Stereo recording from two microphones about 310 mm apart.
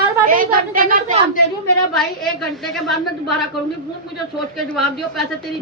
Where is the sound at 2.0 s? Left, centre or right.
Centre.